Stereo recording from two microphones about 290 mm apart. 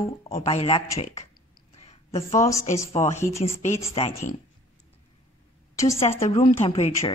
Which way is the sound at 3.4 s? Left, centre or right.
Left.